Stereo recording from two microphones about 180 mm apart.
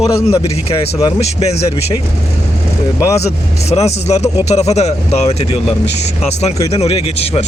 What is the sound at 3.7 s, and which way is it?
Speech, 35° left (ahead or behind).